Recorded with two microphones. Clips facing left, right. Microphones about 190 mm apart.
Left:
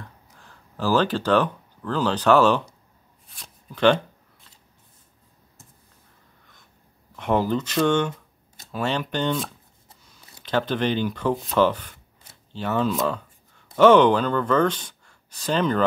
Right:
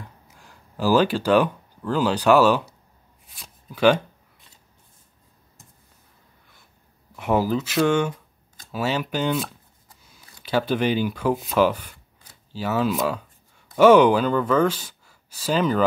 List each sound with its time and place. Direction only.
0.0 s speech: 10° right (ahead or behind)
7.2 s speech: 5° right (ahead or behind)